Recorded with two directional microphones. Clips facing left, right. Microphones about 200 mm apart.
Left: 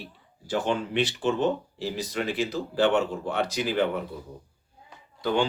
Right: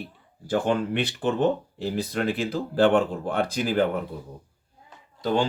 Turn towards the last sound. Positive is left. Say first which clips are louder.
# right 1 dB
turn(degrees=-40)  # may be behind; listen again after turning